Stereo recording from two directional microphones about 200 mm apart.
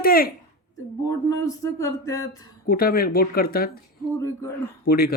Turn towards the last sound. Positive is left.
turn(degrees=50)  # may be behind; listen again after turning